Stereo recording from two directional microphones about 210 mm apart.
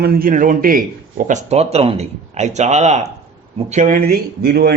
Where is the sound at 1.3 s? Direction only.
35° right (ahead or behind).